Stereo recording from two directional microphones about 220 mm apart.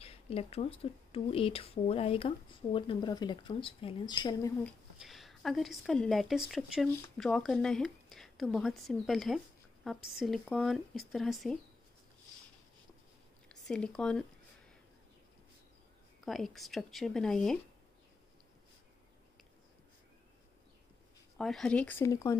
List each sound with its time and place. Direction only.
0.0 s speech: 25° left (ahead or behind)
4.6 s speech: centre (ahead or behind)
13.5 s speech: 5° left (ahead or behind)
16.3 s speech: centre (ahead or behind)
21.4 s speech: centre (ahead or behind)